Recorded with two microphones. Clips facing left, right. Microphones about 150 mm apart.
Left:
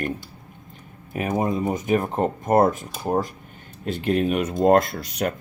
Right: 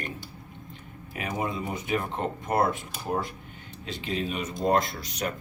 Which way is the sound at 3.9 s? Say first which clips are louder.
Left 10 dB; 55° left (ahead or behind).